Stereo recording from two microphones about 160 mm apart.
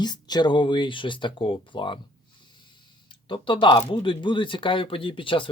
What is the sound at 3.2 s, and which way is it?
Speech, 30° left (ahead or behind).